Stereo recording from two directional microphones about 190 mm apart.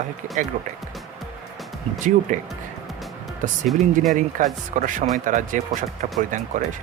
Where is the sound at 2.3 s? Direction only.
40° right (ahead or behind).